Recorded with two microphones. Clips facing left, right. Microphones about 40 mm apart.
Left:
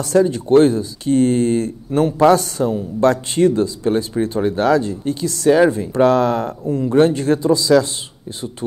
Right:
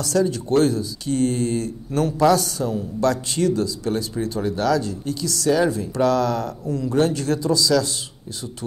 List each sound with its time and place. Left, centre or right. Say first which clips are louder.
0.0 s speech: left 5 dB; left